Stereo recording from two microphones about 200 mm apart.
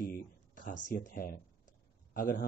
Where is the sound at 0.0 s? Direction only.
45° left (ahead or behind).